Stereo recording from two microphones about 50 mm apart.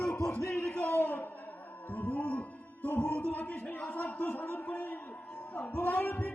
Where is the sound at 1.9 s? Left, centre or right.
Left.